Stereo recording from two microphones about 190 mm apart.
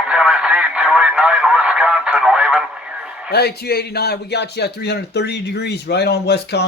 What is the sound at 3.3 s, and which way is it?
A man's voice, 55° left (ahead or behind).